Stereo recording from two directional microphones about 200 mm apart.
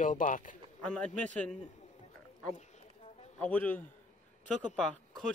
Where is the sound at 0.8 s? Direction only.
5° left (ahead or behind).